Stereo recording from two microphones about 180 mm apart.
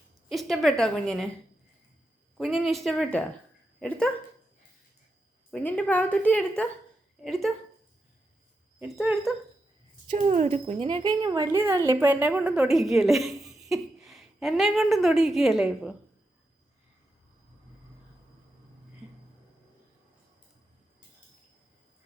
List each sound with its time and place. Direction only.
0.3 s speech: centre (ahead or behind)
2.4 s speech: centre (ahead or behind)
5.5 s a woman's voice: 5° left (ahead or behind)
9.0 s speech: centre (ahead or behind)
10.1 s speech: 40° right (ahead or behind); by 16.0 s centre (ahead or behind)